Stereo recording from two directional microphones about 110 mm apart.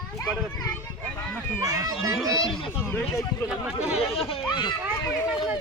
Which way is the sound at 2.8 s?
20° left (ahead or behind).